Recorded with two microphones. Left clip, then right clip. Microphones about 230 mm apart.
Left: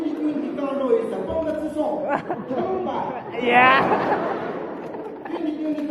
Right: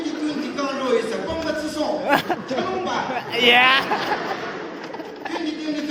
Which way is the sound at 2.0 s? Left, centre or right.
Right.